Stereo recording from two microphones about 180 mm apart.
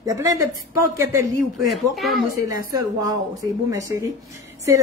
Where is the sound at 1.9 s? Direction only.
Centre (ahead or behind).